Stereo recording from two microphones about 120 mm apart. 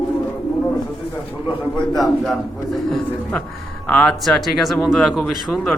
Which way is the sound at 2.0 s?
Centre (ahead or behind).